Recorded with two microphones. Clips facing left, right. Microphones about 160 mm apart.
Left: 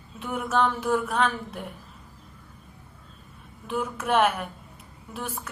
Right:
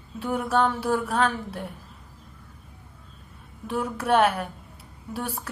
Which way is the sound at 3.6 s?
35° right (ahead or behind).